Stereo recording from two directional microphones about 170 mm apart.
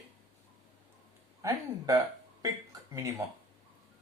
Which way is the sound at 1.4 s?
20° right (ahead or behind).